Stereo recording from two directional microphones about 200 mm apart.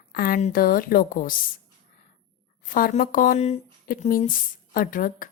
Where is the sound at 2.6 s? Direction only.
45° left (ahead or behind).